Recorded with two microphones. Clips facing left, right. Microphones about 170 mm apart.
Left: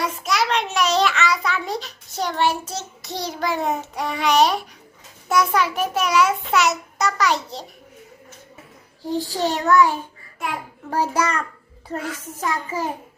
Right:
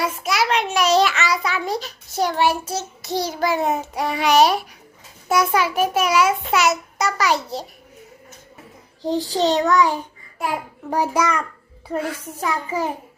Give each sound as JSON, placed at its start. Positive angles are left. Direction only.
{"t": 0.0, "sound": "a sound", "side_deg": -5}
{"t": 2.7, "sound": "a child's voice", "side_deg": 0}
{"t": 9.0, "sound": "a child's voice", "side_deg": -15}